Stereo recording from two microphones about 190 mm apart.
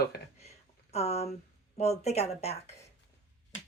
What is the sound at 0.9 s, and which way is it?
Speech, 35° left (ahead or behind).